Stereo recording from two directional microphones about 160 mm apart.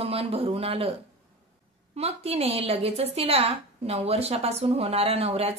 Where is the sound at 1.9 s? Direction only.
40° right (ahead or behind).